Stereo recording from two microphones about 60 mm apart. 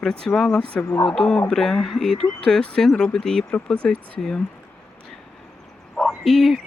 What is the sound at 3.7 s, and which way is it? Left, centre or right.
Speech, centre.